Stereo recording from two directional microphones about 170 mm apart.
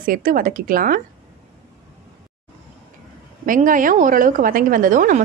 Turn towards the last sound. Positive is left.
turn(degrees=-50)  # may be behind; listen again after turning